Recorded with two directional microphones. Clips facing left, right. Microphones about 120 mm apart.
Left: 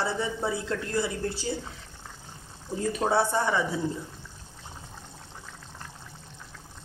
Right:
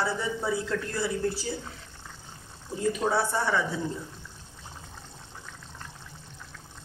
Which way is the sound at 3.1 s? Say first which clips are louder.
Left 2 dB; 15° left (ahead or behind).